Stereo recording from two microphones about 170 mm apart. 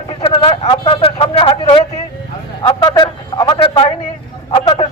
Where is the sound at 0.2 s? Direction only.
30° left (ahead or behind).